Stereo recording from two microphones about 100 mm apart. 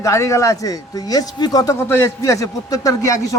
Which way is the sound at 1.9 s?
30° left (ahead or behind).